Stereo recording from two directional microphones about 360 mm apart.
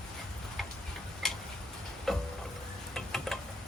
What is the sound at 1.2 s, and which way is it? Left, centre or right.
Tick-tock, centre.